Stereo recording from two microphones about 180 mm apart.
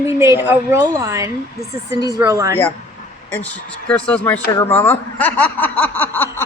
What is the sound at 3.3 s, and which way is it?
Speech, 5° left (ahead or behind).